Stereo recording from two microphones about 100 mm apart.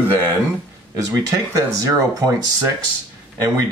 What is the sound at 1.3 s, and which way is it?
Speech, 35° right (ahead or behind).